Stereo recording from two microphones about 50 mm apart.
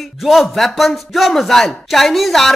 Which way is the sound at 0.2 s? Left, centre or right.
Centre.